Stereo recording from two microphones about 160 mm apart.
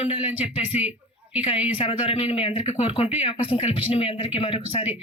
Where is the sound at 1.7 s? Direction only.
35° left (ahead or behind).